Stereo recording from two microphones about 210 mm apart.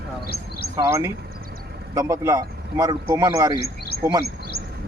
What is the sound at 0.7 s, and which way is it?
Speech, 10° right (ahead or behind).